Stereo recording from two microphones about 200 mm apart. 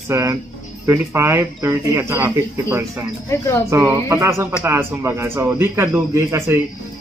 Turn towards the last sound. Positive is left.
turn(degrees=-10)  # may be behind; listen again after turning